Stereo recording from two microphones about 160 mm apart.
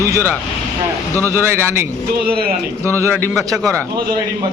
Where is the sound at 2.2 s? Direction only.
70° right (ahead or behind).